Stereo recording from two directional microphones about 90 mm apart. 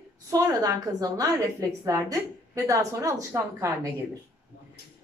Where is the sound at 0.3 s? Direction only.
45° right (ahead or behind).